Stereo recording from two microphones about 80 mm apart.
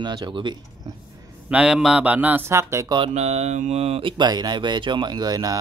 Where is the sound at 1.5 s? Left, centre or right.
Centre.